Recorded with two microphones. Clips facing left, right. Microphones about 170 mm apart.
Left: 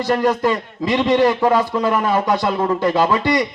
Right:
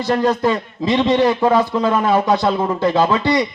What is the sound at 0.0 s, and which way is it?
A man's voice, 20° right (ahead or behind).